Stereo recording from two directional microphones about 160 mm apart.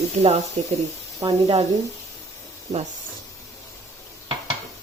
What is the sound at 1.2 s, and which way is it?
Speech, 40° right (ahead or behind).